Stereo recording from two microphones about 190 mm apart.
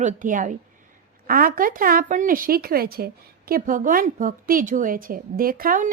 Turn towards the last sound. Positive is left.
turn(degrees=-45)  # may be behind; listen again after turning